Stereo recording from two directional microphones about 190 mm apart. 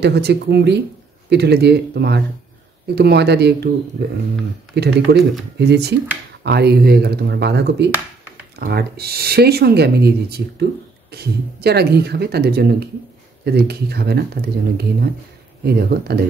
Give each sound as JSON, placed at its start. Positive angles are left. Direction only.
{"t": 0.0, "sound": "speech", "side_deg": -60}
{"t": 4.7, "sound": "speech", "side_deg": -60}